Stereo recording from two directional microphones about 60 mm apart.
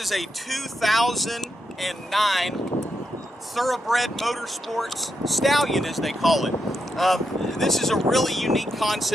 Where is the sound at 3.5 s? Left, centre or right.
Centre.